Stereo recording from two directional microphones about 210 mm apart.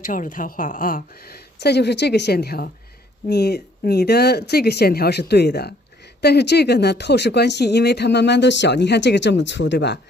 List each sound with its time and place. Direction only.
0.0 s speech: 40° left (ahead or behind)